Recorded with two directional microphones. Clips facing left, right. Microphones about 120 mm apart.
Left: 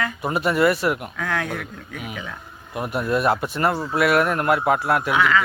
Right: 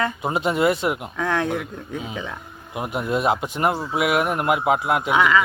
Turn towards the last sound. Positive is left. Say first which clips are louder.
# right 1 dB
turn(degrees=-20)  # may be behind; listen again after turning